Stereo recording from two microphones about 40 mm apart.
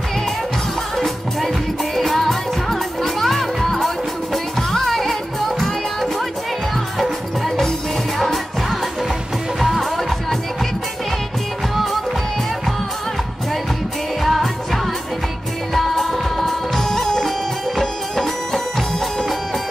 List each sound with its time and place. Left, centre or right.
0.9 s music: centre
11.7 s music: centre
14.2 s music of asia: centre
15.7 s music: centre